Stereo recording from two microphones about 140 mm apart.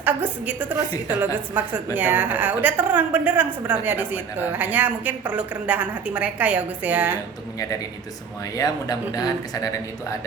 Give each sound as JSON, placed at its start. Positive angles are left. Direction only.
{"t": 0.0, "sound": "a woman's voice", "side_deg": -10}
{"t": 8.5, "sound": "speech", "side_deg": 25}